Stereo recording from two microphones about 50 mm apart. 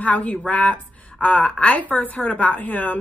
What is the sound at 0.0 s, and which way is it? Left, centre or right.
A woman's voice, left.